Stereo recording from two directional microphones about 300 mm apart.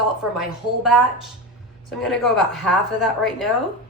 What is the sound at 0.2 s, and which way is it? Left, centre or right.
A woman's voice, centre.